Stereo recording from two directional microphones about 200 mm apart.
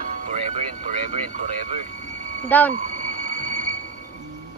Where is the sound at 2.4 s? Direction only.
10° left (ahead or behind).